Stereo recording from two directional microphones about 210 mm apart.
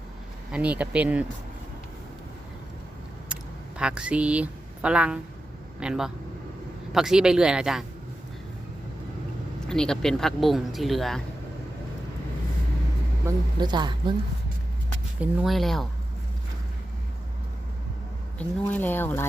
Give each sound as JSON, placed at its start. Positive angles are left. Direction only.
{"t": 0.5, "sound": "speech", "side_deg": -5}
{"t": 3.8, "sound": "speech", "side_deg": -5}
{"t": 9.6, "sound": "speech", "side_deg": 5}
{"t": 13.2, "sound": "speech", "side_deg": -20}
{"t": 15.2, "sound": "speech", "side_deg": 0}
{"t": 18.3, "sound": "speech", "side_deg": 10}